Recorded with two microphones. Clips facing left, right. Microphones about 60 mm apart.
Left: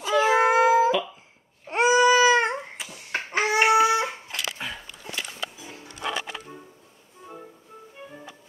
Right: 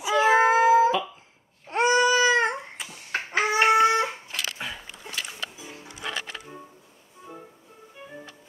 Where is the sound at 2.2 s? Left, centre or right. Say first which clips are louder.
Left 2 dB; centre.